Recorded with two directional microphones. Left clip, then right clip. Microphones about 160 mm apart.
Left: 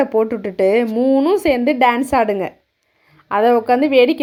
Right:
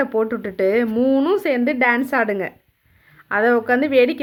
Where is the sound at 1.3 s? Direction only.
20° left (ahead or behind).